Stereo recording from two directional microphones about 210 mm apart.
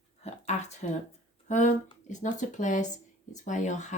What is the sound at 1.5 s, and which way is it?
Speech, 35° left (ahead or behind).